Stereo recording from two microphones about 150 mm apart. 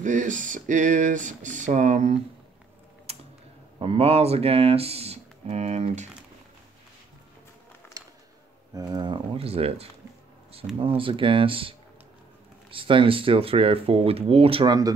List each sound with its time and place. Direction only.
0.0 s speech: 55° right (ahead or behind)
3.1 s typing: 45° right (ahead or behind)
3.8 s speech: 40° right (ahead or behind)
8.0 s music: 20° right (ahead or behind)
8.7 s speech: 25° right (ahead or behind)
12.7 s speech: 35° right (ahead or behind)